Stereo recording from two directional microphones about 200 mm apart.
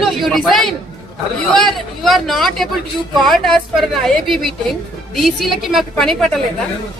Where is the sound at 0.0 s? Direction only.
Centre (ahead or behind).